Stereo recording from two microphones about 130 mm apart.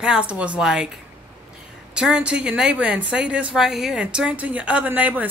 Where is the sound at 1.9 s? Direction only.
5° right (ahead or behind).